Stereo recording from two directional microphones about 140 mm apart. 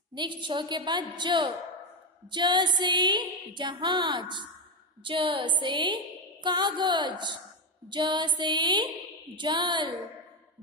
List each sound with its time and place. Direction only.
0.1 s music: 35° right (ahead or behind)